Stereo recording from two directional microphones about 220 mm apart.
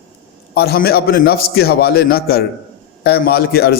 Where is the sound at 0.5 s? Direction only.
45° left (ahead or behind).